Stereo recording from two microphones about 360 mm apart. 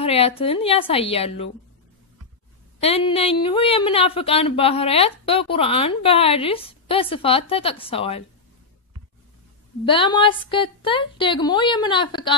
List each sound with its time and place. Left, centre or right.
0.0 s a woman's voice: centre
2.8 s a woman's voice: centre
9.8 s a woman's voice: centre